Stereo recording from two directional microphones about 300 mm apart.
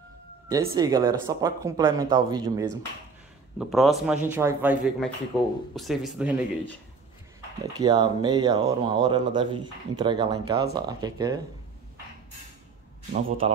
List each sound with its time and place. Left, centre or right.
0.5 s speech: centre
3.5 s speech: centre
7.7 s speech: centre
13.4 s a man's voice: centre